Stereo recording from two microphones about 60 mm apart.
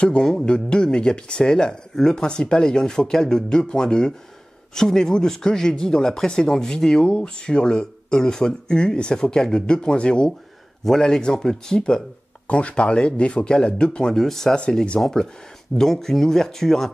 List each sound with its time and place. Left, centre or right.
0.0 s speech: centre